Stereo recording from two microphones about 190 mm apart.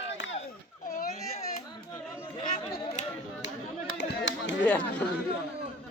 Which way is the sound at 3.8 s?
80° left.